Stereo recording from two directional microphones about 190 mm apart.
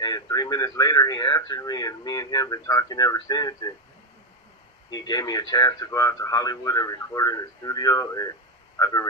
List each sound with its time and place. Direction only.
0.0 s speech: 20° left (ahead or behind)
4.9 s speech: 20° left (ahead or behind)